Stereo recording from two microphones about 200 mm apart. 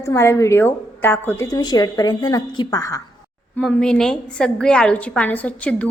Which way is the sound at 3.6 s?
5° left (ahead or behind).